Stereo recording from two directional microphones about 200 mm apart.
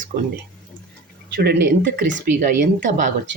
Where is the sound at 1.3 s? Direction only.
50° right (ahead or behind).